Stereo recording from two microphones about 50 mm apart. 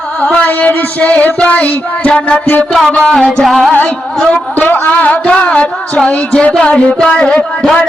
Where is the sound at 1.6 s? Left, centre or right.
Left.